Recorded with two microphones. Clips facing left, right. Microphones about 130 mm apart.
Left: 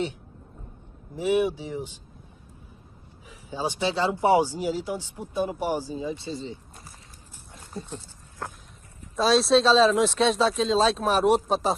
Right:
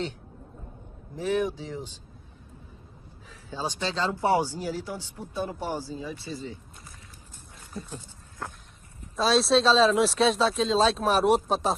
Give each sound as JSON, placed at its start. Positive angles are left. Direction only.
{"t": 1.1, "sound": "speech", "side_deg": 15}
{"t": 3.3, "sound": "speech", "side_deg": 15}
{"t": 7.7, "sound": "speech", "side_deg": 25}
{"t": 9.1, "sound": "speech", "side_deg": 0}